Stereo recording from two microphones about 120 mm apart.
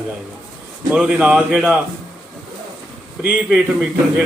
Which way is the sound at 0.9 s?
10° right (ahead or behind).